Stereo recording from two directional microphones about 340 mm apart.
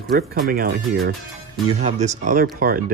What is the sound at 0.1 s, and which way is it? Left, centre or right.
Speech, right.